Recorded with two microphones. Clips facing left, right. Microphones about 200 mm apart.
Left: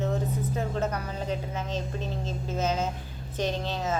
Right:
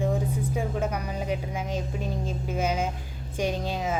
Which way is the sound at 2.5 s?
10° right (ahead or behind).